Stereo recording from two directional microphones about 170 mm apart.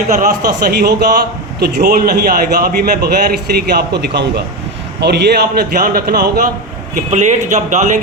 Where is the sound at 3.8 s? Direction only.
80° right.